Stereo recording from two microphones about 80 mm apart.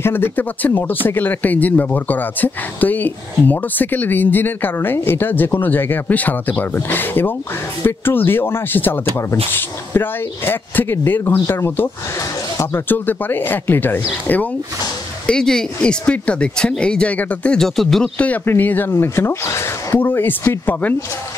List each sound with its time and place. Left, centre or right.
0.0 s speech: left
15.2 s speech: centre
18.1 s speech: centre